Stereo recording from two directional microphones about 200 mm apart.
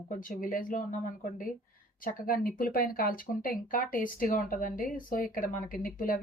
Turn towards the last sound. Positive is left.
turn(degrees=45)  # may be behind; listen again after turning